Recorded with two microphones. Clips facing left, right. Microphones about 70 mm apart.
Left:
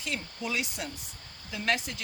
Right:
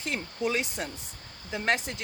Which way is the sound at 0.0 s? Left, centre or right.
Right.